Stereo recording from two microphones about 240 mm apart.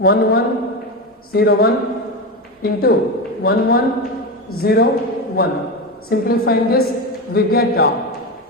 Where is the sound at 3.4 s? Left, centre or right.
Left.